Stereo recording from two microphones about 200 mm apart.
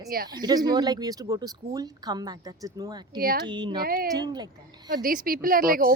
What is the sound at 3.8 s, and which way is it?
Speech, 50° right (ahead or behind).